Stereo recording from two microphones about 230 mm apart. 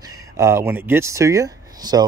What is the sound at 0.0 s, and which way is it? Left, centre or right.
Speech, centre.